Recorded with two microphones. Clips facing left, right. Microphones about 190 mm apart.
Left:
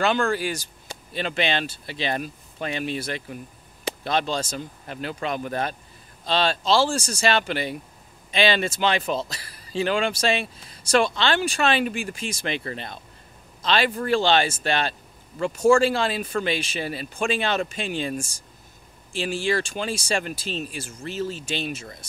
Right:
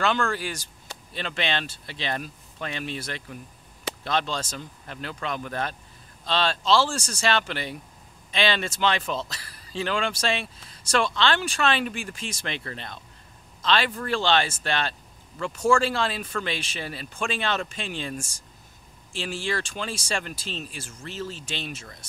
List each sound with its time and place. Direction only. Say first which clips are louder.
0.0 s speech: left 3 dB; 10° left (ahead or behind)
4.3 s speech: left 4 dB; 35° left (ahead or behind)
4.8 s speech: left 3 dB; 10° left (ahead or behind)